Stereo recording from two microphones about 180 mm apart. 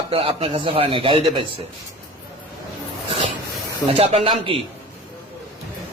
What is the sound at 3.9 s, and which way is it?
Speech, 35° right (ahead or behind).